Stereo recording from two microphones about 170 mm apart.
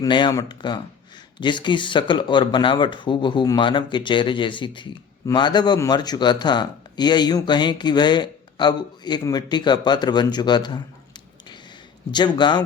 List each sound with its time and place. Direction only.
0.0 s speech: 25° left (ahead or behind)
12.1 s speech: 25° left (ahead or behind)